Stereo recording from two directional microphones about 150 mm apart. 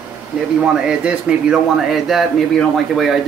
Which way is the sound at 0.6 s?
5° right (ahead or behind).